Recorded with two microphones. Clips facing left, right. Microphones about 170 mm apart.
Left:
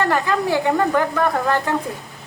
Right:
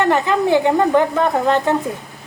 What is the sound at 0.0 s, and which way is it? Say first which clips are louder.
A woman's voice: right 3 dB; 20° right (ahead or behind).